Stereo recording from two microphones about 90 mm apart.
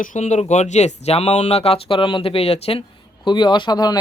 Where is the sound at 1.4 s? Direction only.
90° left.